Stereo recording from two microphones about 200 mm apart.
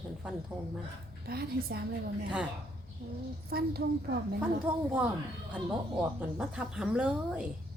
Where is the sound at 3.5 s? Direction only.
50° right (ahead or behind).